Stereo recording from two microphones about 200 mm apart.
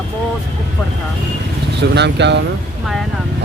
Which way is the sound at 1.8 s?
60° right (ahead or behind).